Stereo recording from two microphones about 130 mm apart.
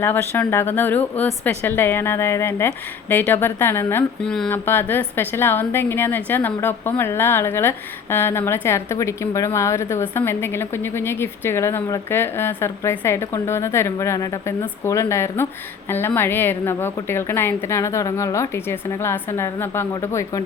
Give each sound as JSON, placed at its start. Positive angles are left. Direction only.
{"t": 0.0, "sound": "speech", "side_deg": 15}
{"t": 4.2, "sound": "speech", "side_deg": 5}
{"t": 4.4, "sound": "a woman's voice", "side_deg": 15}